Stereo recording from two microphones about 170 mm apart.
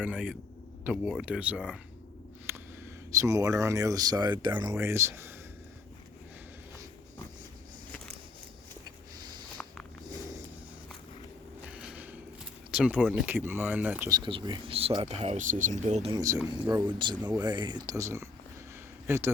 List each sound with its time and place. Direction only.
0.0 s speech: 10° right (ahead or behind)
2.5 s speech: 15° right (ahead or behind)
11.6 s a sound: 5° right (ahead or behind)
12.7 s speech: 5° right (ahead or behind)
14.1 s speech: 30° right (ahead or behind)
16.1 s a man's voice: 20° right (ahead or behind)